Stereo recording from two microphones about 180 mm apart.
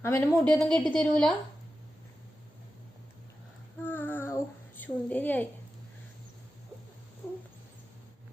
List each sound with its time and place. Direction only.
0.0 s a woman's voice: 15° left (ahead or behind)
3.8 s female singing: 10° left (ahead or behind)
4.8 s a woman's voice: 10° left (ahead or behind)